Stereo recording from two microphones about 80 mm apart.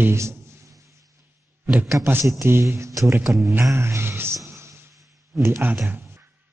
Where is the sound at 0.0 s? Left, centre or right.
Right.